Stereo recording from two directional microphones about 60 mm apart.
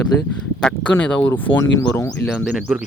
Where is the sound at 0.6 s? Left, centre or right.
Centre.